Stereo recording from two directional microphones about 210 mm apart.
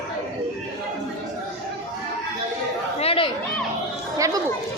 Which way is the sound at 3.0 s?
25° left (ahead or behind).